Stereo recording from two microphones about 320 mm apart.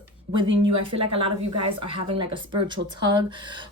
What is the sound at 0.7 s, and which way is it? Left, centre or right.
Speech, right.